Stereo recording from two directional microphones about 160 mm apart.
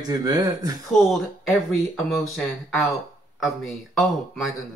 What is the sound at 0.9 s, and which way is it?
Speech, centre (ahead or behind).